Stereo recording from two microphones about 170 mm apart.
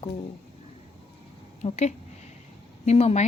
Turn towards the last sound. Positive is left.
turn(degrees=40)  # may be behind; listen again after turning